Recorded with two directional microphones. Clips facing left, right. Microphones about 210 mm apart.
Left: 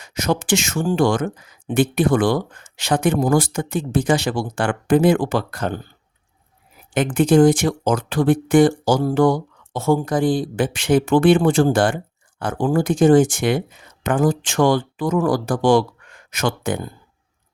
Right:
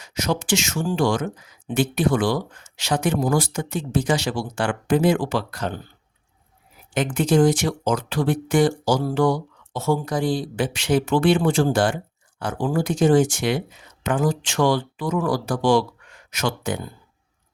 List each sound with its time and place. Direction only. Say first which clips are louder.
0.0 s speech: left 3 dB; 55° left (ahead or behind)
6.9 s speech: left 4 dB; 55° left (ahead or behind)